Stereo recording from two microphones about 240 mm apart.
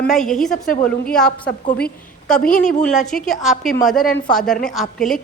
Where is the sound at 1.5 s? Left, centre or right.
Left.